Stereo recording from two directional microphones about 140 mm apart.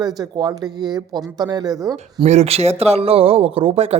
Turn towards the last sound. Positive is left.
turn(degrees=-45)  # may be behind; listen again after turning